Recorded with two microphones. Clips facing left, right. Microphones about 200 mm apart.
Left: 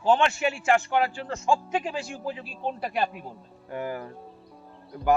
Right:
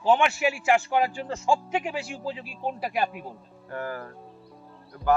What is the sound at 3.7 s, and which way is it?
Speech, 15° left (ahead or behind).